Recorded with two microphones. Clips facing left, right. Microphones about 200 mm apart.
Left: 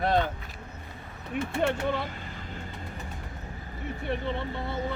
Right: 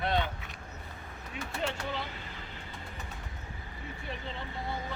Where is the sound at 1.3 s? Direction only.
55° left (ahead or behind).